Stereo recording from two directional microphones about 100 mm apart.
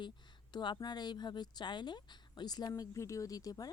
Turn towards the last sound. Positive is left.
turn(degrees=40)  # may be behind; listen again after turning